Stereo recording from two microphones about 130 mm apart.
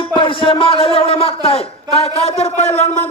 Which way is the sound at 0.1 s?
40° left (ahead or behind).